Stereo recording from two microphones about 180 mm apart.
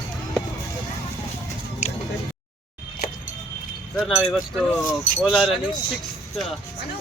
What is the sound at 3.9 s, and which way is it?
Speech, centre (ahead or behind).